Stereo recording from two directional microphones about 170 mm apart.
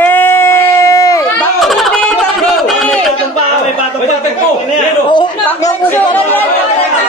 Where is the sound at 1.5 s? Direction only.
Centre (ahead or behind).